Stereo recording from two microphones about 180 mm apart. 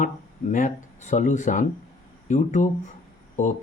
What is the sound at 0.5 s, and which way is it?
Speech, 45° left (ahead or behind).